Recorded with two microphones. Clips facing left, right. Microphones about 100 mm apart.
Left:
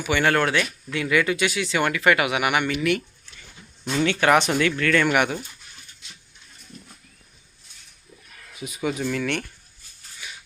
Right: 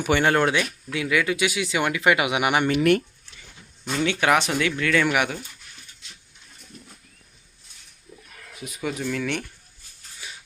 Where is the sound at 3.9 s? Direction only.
5° right (ahead or behind).